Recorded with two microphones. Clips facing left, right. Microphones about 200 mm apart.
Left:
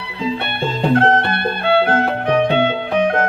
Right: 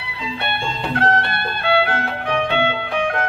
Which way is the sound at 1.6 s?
45° left (ahead or behind).